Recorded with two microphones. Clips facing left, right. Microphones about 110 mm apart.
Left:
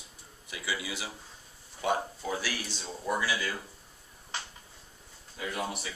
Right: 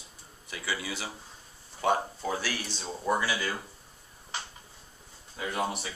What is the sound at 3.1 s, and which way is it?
Speech, 30° right (ahead or behind).